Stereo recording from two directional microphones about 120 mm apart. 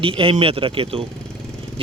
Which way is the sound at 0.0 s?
50° right (ahead or behind).